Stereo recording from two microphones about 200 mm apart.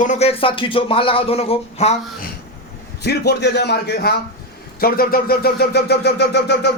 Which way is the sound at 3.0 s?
55° left (ahead or behind).